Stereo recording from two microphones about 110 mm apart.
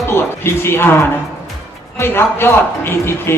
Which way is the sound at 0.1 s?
20° left (ahead or behind).